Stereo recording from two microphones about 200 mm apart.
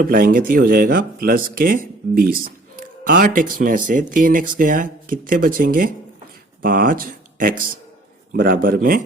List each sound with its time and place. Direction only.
0.0 s speech: 45° right (ahead or behind)